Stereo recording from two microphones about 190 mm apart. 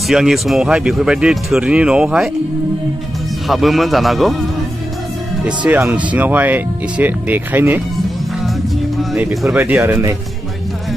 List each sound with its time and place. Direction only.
0.1 s speech: centre (ahead or behind)
3.4 s speech: centre (ahead or behind)
5.7 s speech: 10° right (ahead or behind)
8.9 s speech: centre (ahead or behind)